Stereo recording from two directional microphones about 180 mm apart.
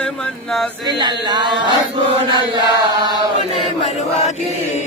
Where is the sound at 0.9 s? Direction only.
25° right (ahead or behind).